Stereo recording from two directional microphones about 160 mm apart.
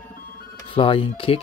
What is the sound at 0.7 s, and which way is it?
Speech, 35° left (ahead or behind).